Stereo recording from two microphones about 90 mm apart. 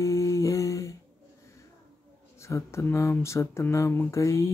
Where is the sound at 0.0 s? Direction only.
35° left (ahead or behind).